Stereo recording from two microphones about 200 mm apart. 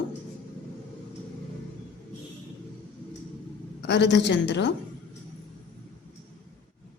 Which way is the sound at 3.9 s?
60° left (ahead or behind).